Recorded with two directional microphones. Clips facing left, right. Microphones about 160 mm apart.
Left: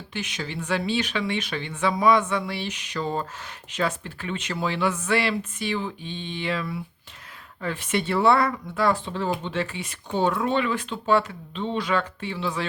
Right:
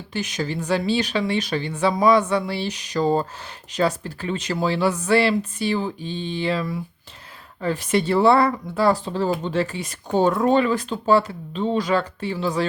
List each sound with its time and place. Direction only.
0.1 s speech: 40° right (ahead or behind)